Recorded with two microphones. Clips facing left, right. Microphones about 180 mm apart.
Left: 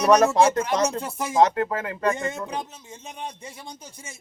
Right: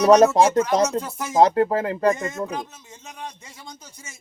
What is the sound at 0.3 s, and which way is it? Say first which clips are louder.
Speech: right 2 dB; 30° right (ahead or behind).